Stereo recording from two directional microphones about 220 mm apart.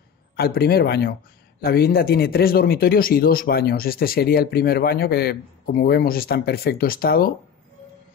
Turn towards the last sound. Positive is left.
turn(degrees=45)  # may be behind; listen again after turning